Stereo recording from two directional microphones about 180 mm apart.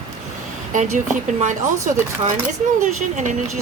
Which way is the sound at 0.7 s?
45° right (ahead or behind).